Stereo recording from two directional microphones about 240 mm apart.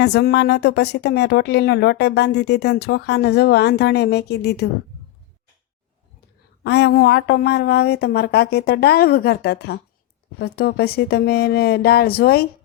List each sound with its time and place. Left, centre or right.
0.0 s a woman's voice: left
6.6 s speech: left